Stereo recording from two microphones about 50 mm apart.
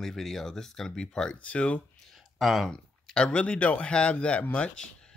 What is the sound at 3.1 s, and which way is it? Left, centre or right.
Speech, centre.